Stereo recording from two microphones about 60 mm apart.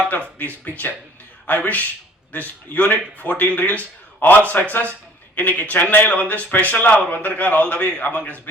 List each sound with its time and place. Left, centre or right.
0.3 s speech: left